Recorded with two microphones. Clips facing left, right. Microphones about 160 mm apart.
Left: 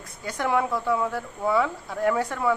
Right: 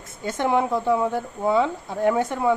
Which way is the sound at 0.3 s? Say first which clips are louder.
Right 3 dB; 25° right (ahead or behind).